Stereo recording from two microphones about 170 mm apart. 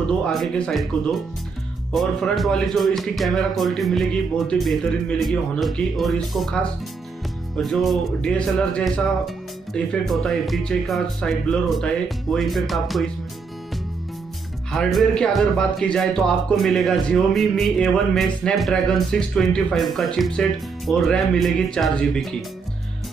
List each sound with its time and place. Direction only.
0.0 s speech: 5° left (ahead or behind)
14.7 s speech: centre (ahead or behind)